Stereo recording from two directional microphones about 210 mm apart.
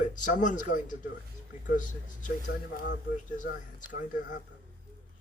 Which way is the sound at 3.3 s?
40° left (ahead or behind).